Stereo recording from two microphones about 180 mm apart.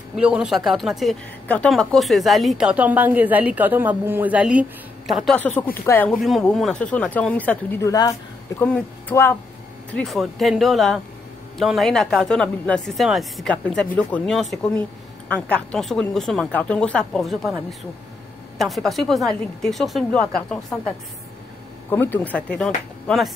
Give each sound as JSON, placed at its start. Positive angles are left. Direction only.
{"t": 0.1, "sound": "speech", "side_deg": -5}
{"t": 7.9, "sound": "a woman's voice", "side_deg": 20}
{"t": 8.6, "sound": "speech", "side_deg": 10}
{"t": 21.9, "sound": "speech", "side_deg": 10}